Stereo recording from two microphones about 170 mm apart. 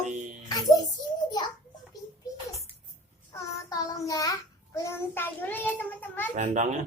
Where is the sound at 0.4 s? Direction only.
25° left (ahead or behind).